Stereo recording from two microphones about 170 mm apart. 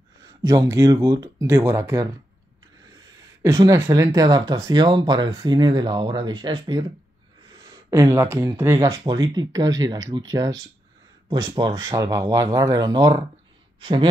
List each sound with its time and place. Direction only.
0.2 s speech: 20° right (ahead or behind)
3.4 s speech: 20° right (ahead or behind)